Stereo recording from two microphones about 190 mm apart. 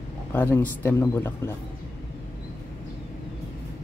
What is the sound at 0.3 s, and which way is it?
A man's voice, 10° left (ahead or behind).